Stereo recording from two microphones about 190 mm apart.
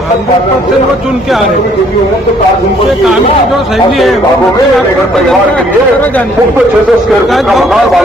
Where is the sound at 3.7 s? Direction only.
Centre (ahead or behind).